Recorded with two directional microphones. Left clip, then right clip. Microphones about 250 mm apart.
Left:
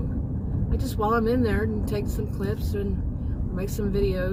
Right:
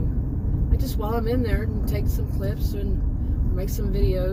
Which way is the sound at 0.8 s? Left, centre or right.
Left.